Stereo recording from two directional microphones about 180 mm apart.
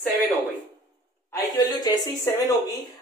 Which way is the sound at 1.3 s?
20° left (ahead or behind).